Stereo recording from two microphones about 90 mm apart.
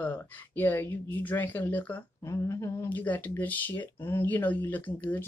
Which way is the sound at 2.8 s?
20° left (ahead or behind).